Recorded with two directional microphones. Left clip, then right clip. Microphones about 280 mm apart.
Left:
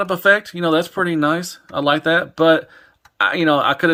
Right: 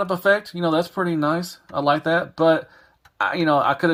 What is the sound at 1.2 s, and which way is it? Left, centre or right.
Speech, left.